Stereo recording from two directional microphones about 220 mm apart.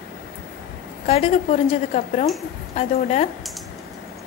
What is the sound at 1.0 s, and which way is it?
A woman's voice, 30° left (ahead or behind).